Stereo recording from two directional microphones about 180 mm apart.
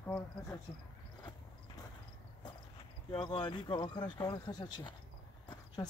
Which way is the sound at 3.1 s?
25° left (ahead or behind).